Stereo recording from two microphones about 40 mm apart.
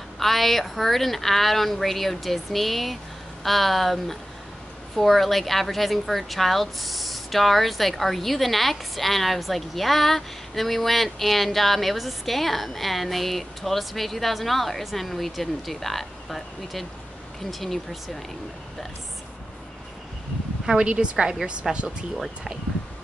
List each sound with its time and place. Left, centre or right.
0.2 s a woman's voice: centre
20.6 s a woman's voice: right; by 22.5 s centre